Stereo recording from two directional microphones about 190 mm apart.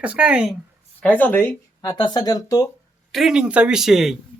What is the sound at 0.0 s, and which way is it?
Speech, 5° right (ahead or behind).